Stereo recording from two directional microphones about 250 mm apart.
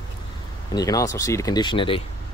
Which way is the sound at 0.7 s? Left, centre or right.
Centre.